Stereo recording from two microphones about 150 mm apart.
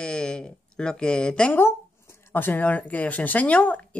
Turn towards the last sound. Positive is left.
turn(degrees=10)  # may be behind; listen again after turning